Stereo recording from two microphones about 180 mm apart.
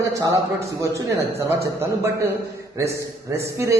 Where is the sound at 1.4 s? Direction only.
15° right (ahead or behind).